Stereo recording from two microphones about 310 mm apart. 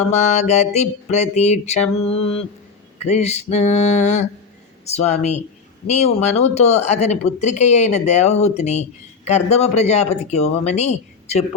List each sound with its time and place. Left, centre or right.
0.1 s speech: left